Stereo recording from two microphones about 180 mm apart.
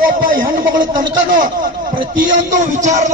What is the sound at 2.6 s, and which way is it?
Speech, 40° right (ahead or behind).